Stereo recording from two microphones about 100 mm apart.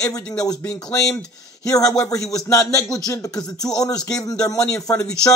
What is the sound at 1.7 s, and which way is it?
Speech, 35° left (ahead or behind).